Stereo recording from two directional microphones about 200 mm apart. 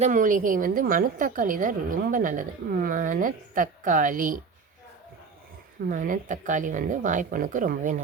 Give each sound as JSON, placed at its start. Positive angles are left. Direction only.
{"t": 0.0, "sound": "a woman's voice", "side_deg": -40}
{"t": 5.9, "sound": "a woman's voice", "side_deg": -40}